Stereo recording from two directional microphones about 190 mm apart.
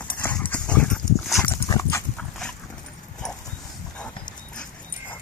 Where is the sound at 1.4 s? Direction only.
15° left (ahead or behind).